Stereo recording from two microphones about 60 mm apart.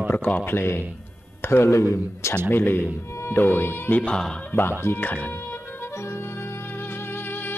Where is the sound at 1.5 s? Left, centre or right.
Left.